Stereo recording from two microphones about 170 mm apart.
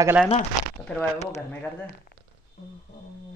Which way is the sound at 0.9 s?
10° left (ahead or behind).